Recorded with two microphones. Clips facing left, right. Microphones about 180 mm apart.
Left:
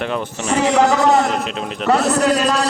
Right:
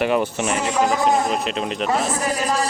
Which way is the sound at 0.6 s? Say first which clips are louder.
Left 7 dB; 80° left.